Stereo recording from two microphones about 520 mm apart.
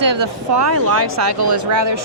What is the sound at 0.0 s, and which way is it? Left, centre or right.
A woman's voice, right.